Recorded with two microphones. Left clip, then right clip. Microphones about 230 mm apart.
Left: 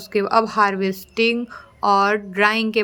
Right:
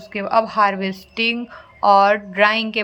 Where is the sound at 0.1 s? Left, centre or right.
Centre.